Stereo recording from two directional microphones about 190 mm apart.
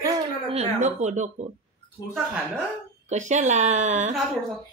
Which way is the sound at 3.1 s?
40° right (ahead or behind).